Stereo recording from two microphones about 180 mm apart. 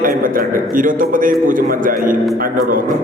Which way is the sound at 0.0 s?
50° right (ahead or behind).